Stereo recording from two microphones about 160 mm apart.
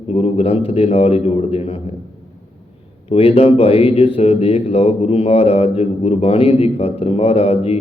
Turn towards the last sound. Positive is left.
turn(degrees=40)  # may be behind; listen again after turning